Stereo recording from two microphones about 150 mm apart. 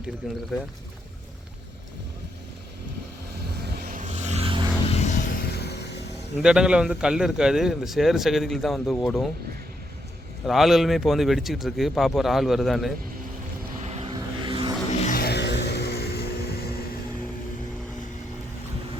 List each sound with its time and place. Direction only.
0.5 s a man's voice: 5° right (ahead or behind)
3.8 s vehicle: 55° right (ahead or behind); by 4.7 s 35° right (ahead or behind)
4.9 s vehicle: 50° left (ahead or behind); by 5.8 s 90° left
6.4 s a man's voice: 5° right (ahead or behind)
10.4 s a man's voice: centre (ahead or behind)
13.8 s vehicle: 45° right (ahead or behind)
14.1 s vehicle: 30° right (ahead or behind)
15.1 s vehicle: 90° left